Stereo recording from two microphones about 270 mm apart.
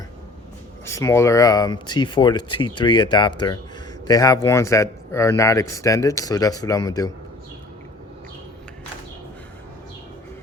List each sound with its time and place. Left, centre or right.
0.9 s speech: centre